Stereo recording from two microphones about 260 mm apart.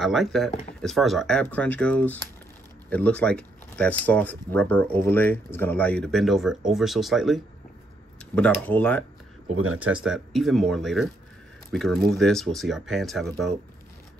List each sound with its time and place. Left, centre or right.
0.0 s speech: centre
9.5 s speech: right
9.8 s speech: centre